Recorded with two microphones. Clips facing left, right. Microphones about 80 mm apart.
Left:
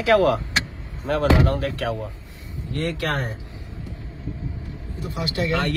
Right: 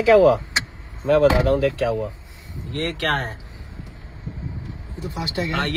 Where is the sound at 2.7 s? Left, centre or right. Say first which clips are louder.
Right 2 dB; right.